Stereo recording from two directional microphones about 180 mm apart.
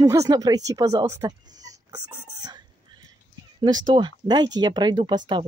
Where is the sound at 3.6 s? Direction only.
25° right (ahead or behind).